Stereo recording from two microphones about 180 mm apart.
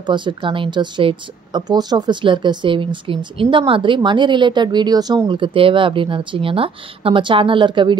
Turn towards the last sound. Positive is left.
turn(degrees=-25)  # may be behind; listen again after turning